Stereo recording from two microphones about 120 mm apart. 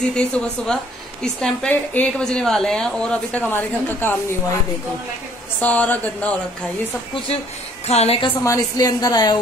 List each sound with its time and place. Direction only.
0.1 s a woman's voice: 10° left (ahead or behind)
5.6 s a woman's voice: 15° left (ahead or behind)
7.8 s a woman's voice: 60° left (ahead or behind)
8.5 s a woman's voice: 30° left (ahead or behind)